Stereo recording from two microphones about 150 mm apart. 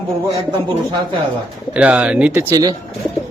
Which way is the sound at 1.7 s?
10° right (ahead or behind).